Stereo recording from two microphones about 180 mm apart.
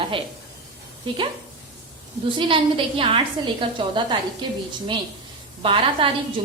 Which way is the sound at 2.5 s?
30° right (ahead or behind).